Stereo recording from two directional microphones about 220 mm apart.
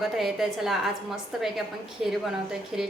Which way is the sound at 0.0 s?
Centre (ahead or behind).